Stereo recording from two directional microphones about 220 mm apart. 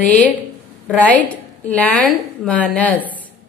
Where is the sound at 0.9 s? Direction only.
5° left (ahead or behind).